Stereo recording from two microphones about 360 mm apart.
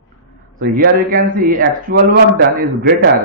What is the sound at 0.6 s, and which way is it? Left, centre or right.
A man's voice, right.